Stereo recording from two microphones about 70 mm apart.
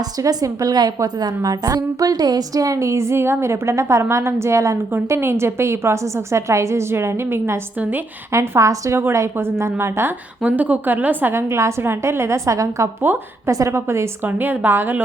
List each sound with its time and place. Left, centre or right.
0.0 s a woman's voice: right
7.8 s speech: right
8.3 s a woman's voice: right
10.4 s a woman's voice: right
13.0 s a woman's voice: right
13.5 s a woman's voice: right
14.3 s speech: right